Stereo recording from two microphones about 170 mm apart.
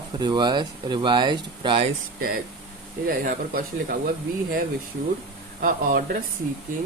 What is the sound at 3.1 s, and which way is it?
Speech, 55° right (ahead or behind).